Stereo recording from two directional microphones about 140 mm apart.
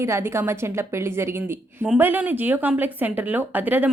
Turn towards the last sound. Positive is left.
turn(degrees=-10)  # may be behind; listen again after turning